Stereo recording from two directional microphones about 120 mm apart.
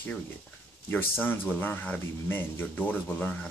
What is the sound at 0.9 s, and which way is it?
Speech, 15° left (ahead or behind).